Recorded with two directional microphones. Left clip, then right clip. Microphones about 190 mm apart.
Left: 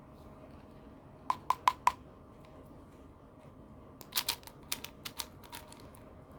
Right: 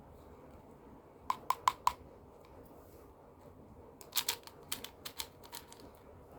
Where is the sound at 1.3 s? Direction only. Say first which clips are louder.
Left 3 dB; 20° left (ahead or behind).